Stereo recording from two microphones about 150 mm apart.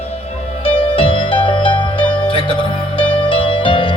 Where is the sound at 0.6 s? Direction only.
40° left (ahead or behind).